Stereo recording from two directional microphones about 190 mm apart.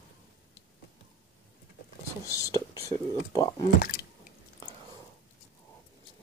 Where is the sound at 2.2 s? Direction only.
15° left (ahead or behind).